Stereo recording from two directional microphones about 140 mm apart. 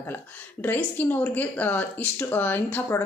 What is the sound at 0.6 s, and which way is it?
Speech, 15° left (ahead or behind).